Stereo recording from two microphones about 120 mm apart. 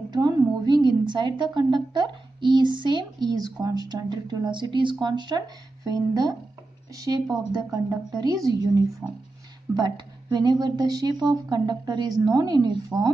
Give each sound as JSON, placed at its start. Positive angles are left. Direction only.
{"t": 0.1, "sound": "a woman's voice", "side_deg": -35}
{"t": 9.0, "sound": "speech", "side_deg": -10}
{"t": 9.8, "sound": "a woman's voice", "side_deg": -35}